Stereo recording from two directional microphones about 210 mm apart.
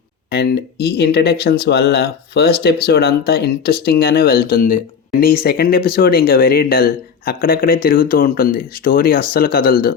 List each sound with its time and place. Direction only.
0.3 s speech: 50° left (ahead or behind)